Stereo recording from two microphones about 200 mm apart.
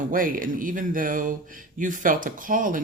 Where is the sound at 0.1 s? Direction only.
45° right (ahead or behind).